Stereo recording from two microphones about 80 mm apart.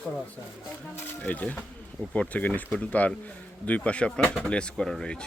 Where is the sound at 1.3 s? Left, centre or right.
Centre.